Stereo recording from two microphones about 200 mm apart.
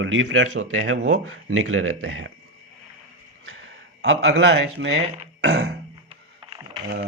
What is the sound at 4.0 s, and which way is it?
Speech, 65° right (ahead or behind).